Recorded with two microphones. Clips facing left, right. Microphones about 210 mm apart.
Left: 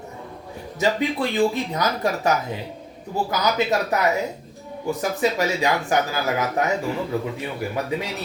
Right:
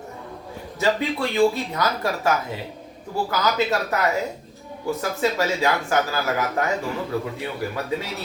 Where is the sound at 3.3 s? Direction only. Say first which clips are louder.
Left 1 dB; 15° left (ahead or behind).